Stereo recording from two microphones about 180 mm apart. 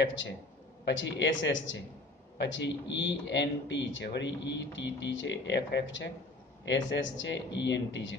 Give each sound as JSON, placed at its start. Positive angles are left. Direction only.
{"t": 0.8, "sound": "speech", "side_deg": 75}
{"t": 2.3, "sound": "a man's voice", "side_deg": 75}